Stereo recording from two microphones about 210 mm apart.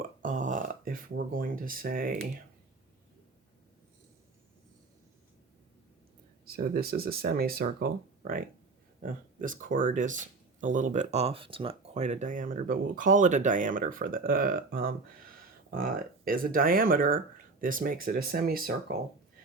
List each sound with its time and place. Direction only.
0.2 s speech: 40° right (ahead or behind)
6.4 s speech: 45° right (ahead or behind)